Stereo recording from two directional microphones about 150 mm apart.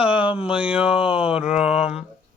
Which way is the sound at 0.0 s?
10° right (ahead or behind).